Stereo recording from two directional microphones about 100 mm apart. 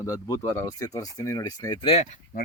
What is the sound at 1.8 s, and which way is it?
Speech, 70° left (ahead or behind).